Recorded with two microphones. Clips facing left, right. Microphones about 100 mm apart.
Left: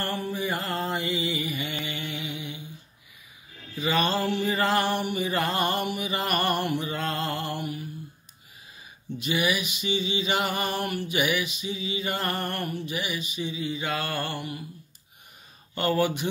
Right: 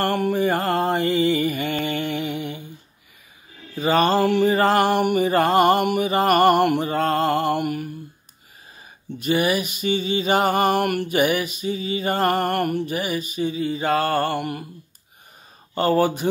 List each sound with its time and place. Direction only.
0.0 s mantra: 60° right (ahead or behind)
3.7 s mantra: 45° right (ahead or behind)
6.9 s mantra: 45° right (ahead or behind); by 7.9 s 60° right (ahead or behind)
9.2 s mantra: 45° right (ahead or behind); by 11.1 s 60° right (ahead or behind)
11.1 s mantra: 45° right (ahead or behind)
15.7 s speech: 35° right (ahead or behind)